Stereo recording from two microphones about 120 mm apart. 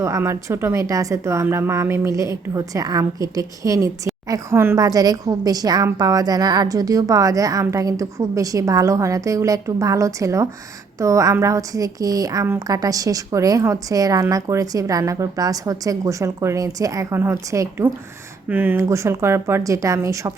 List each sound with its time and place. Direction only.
0.0 s speech: 25° right (ahead or behind)